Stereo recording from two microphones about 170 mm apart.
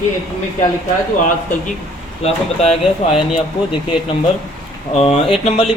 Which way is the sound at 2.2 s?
35° left (ahead or behind).